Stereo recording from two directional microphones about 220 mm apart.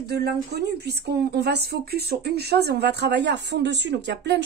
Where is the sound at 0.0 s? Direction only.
45° right (ahead or behind).